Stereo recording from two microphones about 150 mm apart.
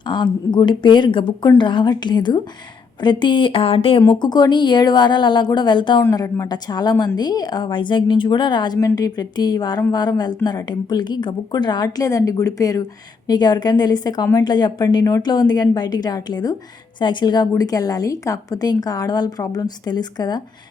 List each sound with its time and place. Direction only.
0.1 s a woman's voice: 30° left (ahead or behind)